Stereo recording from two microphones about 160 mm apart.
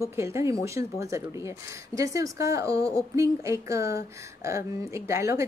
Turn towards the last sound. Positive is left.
turn(degrees=-20)  # may be behind; listen again after turning